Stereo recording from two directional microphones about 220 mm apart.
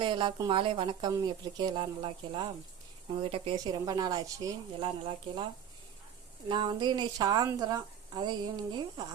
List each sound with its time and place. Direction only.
0.0 s a woman's voice: 20° right (ahead or behind)
6.5 s a woman's voice: 20° right (ahead or behind)